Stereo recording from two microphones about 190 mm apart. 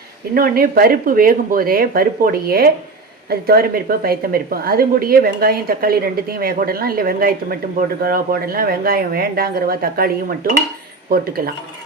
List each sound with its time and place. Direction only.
0.3 s a woman's voice: 50° right (ahead or behind)